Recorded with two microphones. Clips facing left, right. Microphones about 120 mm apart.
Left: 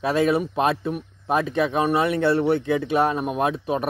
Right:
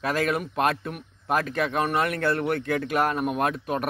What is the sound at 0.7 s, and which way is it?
Speech, 5° left (ahead or behind).